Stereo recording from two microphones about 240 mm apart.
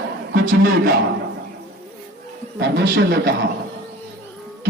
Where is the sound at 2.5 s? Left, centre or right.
Right.